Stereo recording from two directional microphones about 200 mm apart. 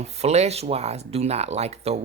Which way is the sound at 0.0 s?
35° right (ahead or behind).